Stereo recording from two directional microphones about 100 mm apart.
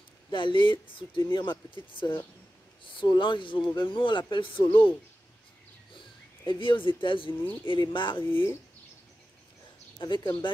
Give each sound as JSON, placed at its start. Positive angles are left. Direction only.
{"t": 0.3, "sound": "speech", "side_deg": 55}
{"t": 5.9, "sound": "speech", "side_deg": 55}
{"t": 8.2, "sound": "speech", "side_deg": 20}
{"t": 9.9, "sound": "speech", "side_deg": 50}